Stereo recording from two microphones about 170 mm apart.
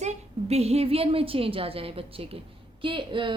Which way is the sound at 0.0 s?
40° right (ahead or behind).